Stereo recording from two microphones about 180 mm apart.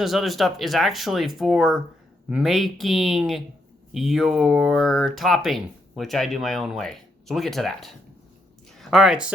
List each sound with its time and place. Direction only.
0.0 s speech: centre (ahead or behind)